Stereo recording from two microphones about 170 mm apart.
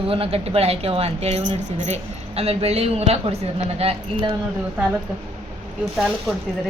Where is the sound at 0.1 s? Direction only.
35° right (ahead or behind).